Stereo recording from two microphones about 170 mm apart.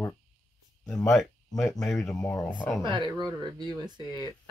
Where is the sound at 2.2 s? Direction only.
20° left (ahead or behind).